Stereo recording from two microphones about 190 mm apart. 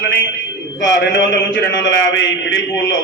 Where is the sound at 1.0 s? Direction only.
70° left (ahead or behind).